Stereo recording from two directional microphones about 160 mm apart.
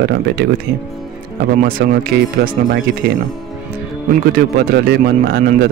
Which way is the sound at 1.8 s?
90° right.